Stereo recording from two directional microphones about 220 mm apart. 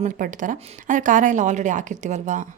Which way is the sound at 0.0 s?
35° right (ahead or behind).